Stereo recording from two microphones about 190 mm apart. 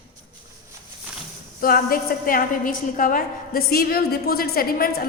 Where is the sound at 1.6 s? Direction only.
50° left (ahead or behind).